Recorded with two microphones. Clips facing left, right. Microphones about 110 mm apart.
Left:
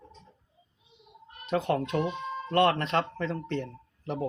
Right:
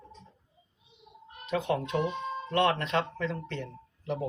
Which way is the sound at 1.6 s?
50° left (ahead or behind).